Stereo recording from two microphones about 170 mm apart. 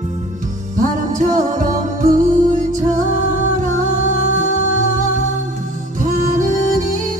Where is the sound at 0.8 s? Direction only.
50° right (ahead or behind).